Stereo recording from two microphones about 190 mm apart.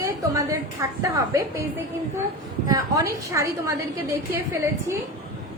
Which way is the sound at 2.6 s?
15° right (ahead or behind).